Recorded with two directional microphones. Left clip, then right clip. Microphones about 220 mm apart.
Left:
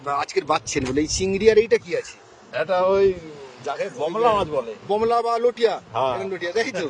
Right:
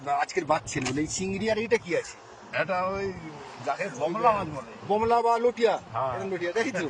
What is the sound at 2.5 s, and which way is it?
Speech, 35° left (ahead or behind).